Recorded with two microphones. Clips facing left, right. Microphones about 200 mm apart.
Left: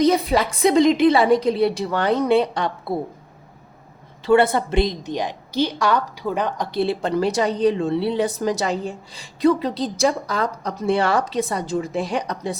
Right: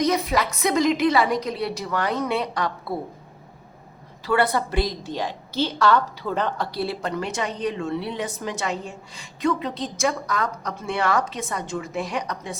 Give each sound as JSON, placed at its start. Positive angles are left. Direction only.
{"t": 0.0, "sound": "a woman's voice", "side_deg": 30}
{"t": 4.3, "sound": "a woman's voice", "side_deg": 25}